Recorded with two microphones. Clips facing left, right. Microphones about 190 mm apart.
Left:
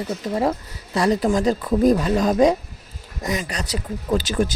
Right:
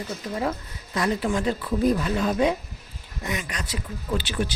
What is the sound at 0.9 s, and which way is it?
Speech, 35° left (ahead or behind).